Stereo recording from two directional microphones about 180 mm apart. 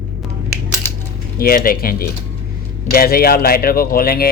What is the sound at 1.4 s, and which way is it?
Speech, 55° left (ahead or behind).